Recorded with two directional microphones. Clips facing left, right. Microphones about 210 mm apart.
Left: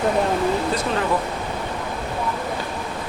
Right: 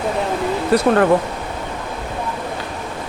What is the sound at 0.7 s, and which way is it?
Speech, 60° right (ahead or behind).